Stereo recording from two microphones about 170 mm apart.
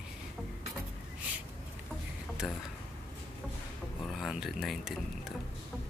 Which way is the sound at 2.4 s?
Centre (ahead or behind).